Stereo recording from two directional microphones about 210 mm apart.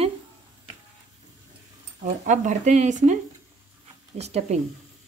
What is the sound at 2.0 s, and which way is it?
Speech, 35° right (ahead or behind).